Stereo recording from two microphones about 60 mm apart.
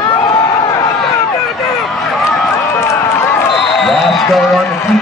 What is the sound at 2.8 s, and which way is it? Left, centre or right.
Run, left.